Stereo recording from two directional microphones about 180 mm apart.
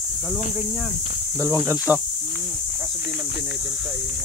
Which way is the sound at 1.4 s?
15° right (ahead or behind).